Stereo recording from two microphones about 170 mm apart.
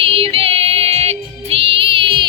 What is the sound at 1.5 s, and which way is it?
Music, 35° right (ahead or behind).